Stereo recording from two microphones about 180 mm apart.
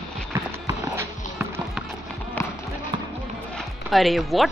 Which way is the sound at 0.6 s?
15° right (ahead or behind).